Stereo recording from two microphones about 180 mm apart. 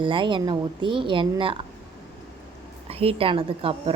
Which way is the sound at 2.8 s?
35° right (ahead or behind).